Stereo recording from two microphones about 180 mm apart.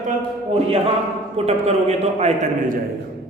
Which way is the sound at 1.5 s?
35° right (ahead or behind).